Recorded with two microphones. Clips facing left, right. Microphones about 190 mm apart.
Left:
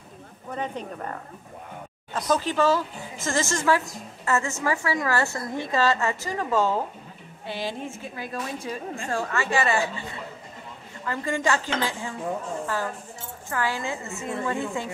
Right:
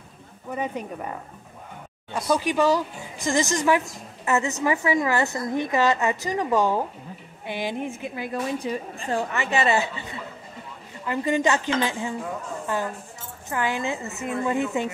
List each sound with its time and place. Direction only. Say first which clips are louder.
0.5 s speech: right 2 dB; 10° right (ahead or behind)
11.1 s dishes: right 3 dB; 20° right (ahead or behind)
13.5 s dishes: right 2 dB; 20° right (ahead or behind)